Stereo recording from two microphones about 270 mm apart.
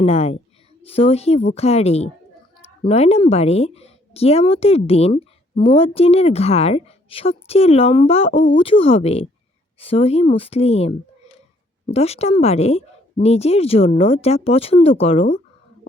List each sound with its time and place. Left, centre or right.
0.0 s speech: left